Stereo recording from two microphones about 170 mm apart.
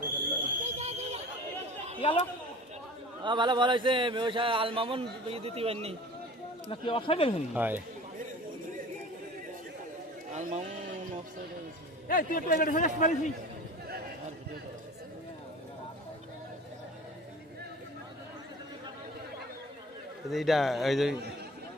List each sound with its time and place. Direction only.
0.4 s a sound: 40° right (ahead or behind)
2.0 s a man's voice: 30° left (ahead or behind)
3.2 s speech: 30° right (ahead or behind)
6.7 s speech: 30° left (ahead or behind)
7.5 s speech: 10° right (ahead or behind)
10.3 s a sound: 45° right (ahead or behind)
12.0 s a man's voice: 55° left (ahead or behind)
20.3 s a man's voice: centre (ahead or behind)